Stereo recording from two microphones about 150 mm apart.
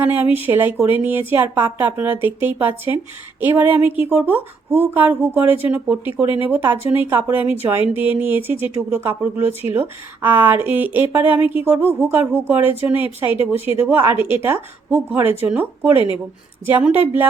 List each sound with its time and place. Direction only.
0.0 s speech: 10° right (ahead or behind)
14.2 s a woman's voice: 35° left (ahead or behind)
14.4 s speech: 15° right (ahead or behind)